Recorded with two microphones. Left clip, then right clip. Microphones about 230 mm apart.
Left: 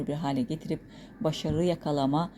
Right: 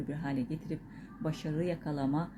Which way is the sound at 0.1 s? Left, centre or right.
Left.